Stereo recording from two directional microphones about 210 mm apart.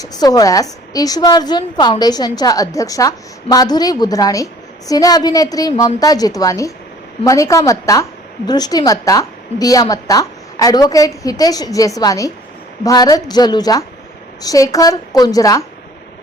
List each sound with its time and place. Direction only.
0.0 s a woman's voice: 15° left (ahead or behind)